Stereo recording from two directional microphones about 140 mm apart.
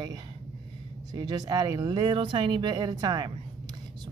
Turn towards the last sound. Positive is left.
turn(degrees=-30)  # may be behind; listen again after turning